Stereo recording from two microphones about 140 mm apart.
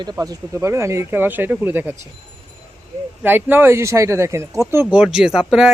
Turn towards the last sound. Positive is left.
turn(degrees=-5)  # may be behind; listen again after turning